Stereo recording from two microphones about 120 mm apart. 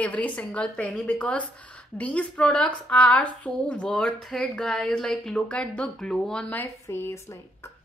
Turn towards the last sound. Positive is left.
turn(degrees=20)  # may be behind; listen again after turning